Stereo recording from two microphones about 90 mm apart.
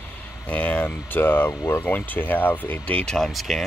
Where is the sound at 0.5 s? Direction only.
15° left (ahead or behind).